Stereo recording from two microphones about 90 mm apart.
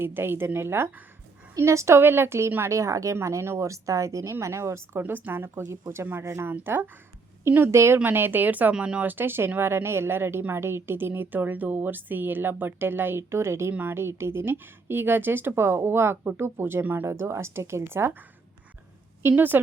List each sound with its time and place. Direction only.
0.0 s a woman's voice: 25° right (ahead or behind)
19.2 s a woman's voice: 25° right (ahead or behind)